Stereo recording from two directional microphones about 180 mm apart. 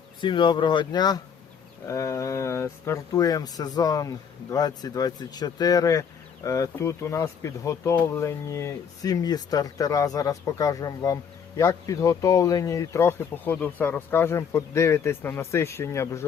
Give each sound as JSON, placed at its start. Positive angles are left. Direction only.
{"t": 0.2, "sound": "speech", "side_deg": 25}